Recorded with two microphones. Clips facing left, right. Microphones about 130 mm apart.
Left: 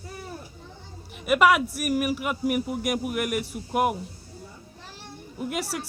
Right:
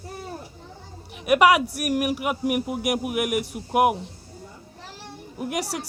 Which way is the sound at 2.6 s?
60° right (ahead or behind).